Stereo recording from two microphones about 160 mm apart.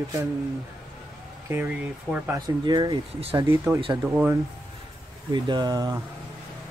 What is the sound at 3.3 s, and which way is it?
Speech, 15° right (ahead or behind).